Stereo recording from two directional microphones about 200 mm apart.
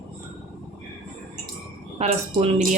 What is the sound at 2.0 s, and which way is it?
Speech, 30° right (ahead or behind).